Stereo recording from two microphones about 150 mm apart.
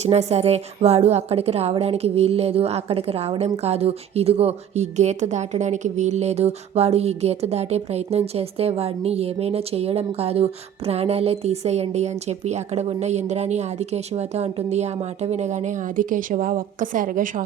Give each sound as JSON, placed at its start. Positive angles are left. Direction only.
{"t": 0.0, "sound": "a woman's voice", "side_deg": -45}